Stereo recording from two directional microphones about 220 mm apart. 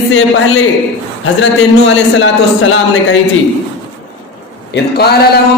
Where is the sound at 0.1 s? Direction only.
65° left (ahead or behind).